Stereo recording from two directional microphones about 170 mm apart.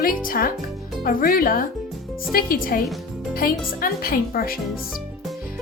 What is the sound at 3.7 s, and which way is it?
Speech, 60° left (ahead or behind).